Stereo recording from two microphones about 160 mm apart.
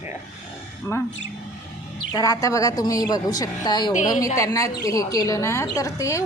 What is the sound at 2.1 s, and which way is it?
A woman's voice, 20° left (ahead or behind).